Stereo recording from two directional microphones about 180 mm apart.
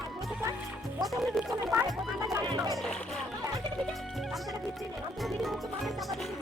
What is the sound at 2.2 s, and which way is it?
Speech, 15° right (ahead or behind).